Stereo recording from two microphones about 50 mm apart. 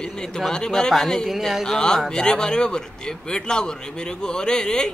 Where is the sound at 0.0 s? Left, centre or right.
Centre.